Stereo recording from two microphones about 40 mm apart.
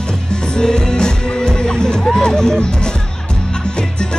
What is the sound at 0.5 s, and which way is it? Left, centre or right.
Music, centre.